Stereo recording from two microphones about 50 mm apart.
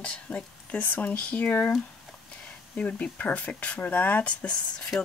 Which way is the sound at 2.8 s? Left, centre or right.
Left.